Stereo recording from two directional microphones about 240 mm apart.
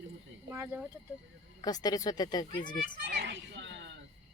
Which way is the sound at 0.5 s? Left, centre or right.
Centre.